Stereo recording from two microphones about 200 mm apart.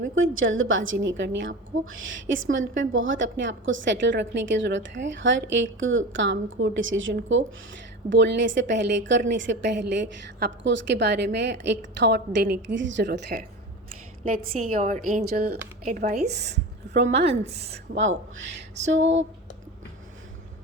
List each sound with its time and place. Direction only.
0.2 s a woman's voice: 80° right; by 13.4 s 55° right (ahead or behind)
14.7 s speech: 40° right (ahead or behind)
16.3 s a woman's voice: 55° right (ahead or behind)
17.2 s speech: 30° right (ahead or behind)
17.9 s a woman's voice: 70° right (ahead or behind)